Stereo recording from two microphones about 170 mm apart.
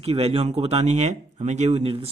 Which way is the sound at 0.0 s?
35° right (ahead or behind).